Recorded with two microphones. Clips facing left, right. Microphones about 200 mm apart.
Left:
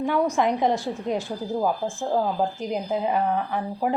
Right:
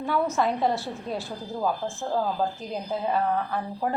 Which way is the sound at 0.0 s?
15° left (ahead or behind).